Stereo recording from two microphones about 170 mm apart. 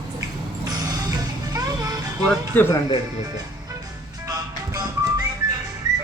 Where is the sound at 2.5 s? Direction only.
10° left (ahead or behind).